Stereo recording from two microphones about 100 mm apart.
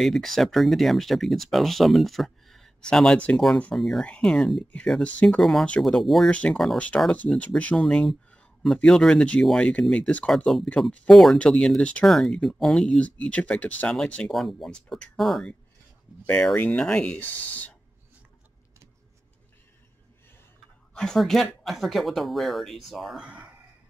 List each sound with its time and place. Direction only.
0.0 s speech: centre (ahead or behind)
6.3 s speech: 10° left (ahead or behind)
16.3 s speech: 15° left (ahead or behind)
20.9 s speech: 5° left (ahead or behind)